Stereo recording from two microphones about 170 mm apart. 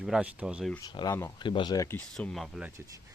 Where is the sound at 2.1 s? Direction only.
Centre (ahead or behind).